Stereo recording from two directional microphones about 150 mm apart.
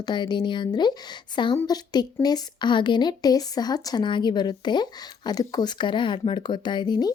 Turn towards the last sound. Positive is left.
turn(degrees=30)  # may be behind; listen again after turning